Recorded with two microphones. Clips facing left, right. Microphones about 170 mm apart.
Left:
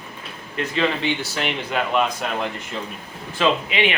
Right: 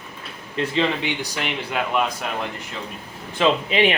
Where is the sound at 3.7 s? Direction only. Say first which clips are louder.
Right 3 dB; 40° right (ahead or behind).